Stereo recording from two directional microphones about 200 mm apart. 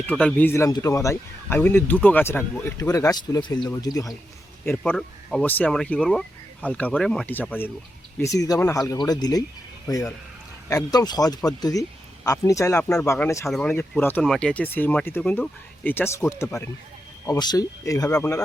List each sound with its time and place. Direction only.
0.0 s speech: 5° left (ahead or behind)